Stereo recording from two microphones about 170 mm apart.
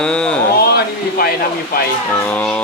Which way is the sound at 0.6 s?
70° left (ahead or behind).